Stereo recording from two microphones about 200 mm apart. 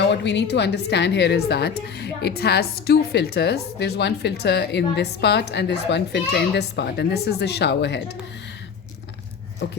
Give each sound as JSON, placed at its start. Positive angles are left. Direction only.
{"t": 0.1, "sound": "a woman's voice", "side_deg": 60}